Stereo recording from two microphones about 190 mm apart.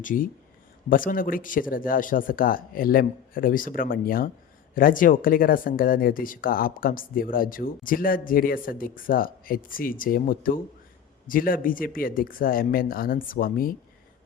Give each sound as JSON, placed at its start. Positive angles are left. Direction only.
{"t": 0.0, "sound": "speech", "side_deg": 45}